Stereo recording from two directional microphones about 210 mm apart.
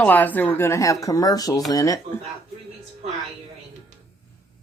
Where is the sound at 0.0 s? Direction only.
10° left (ahead or behind).